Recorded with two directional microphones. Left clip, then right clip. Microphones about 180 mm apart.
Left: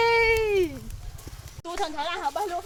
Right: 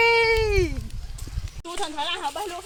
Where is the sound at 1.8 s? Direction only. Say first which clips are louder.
Right 1 dB; 20° left (ahead or behind).